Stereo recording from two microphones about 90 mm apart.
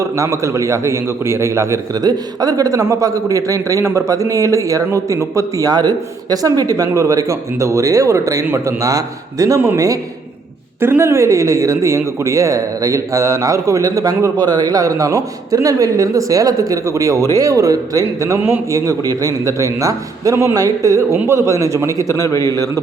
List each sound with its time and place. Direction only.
0.0 s speech: 35° right (ahead or behind)
2.0 s speech: 45° right (ahead or behind)
10.8 s speech: 25° right (ahead or behind)
22.1 s a man's voice: 35° left (ahead or behind)